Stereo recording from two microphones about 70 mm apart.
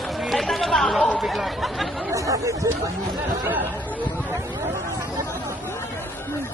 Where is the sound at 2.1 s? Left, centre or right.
Right.